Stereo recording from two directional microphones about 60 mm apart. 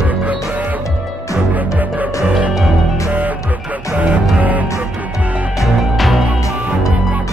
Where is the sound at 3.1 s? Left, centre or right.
Right.